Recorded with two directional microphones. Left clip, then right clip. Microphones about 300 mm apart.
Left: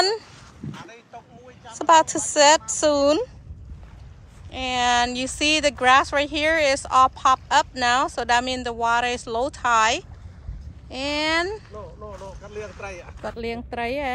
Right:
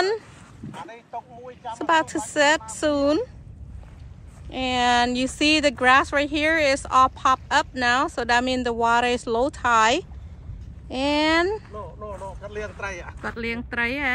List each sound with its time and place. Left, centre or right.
0.6 s a sound: left
1.8 s speech: centre
4.5 s speech: centre